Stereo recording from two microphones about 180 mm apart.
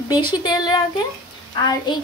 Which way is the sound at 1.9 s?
25° left (ahead or behind).